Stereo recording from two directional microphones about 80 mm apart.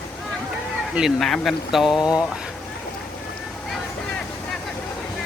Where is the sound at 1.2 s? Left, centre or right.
Centre.